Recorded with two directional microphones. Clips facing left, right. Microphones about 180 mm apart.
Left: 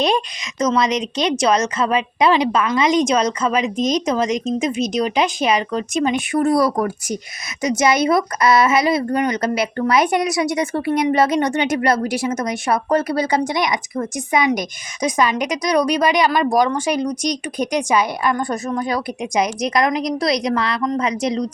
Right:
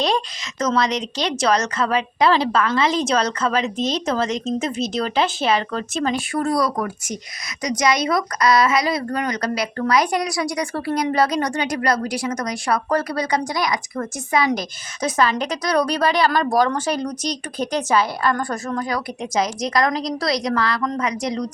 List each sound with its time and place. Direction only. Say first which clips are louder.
0.8 s speech: left 3 dB; 20° left (ahead or behind)